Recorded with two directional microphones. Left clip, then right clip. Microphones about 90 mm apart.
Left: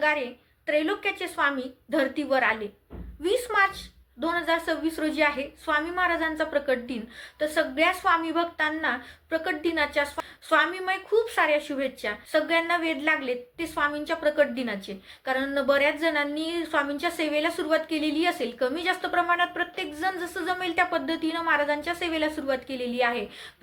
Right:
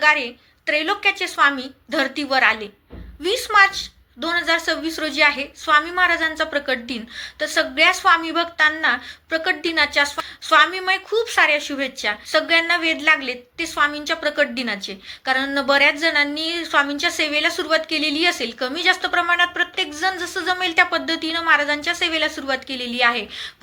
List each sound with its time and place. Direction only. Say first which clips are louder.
0.0 s a woman's voice: right 8 dB; 30° left (ahead or behind)